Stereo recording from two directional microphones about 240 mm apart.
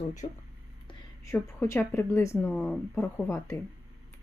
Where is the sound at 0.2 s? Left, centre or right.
Left.